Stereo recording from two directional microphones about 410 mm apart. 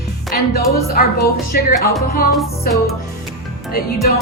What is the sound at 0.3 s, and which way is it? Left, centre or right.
Speech, left.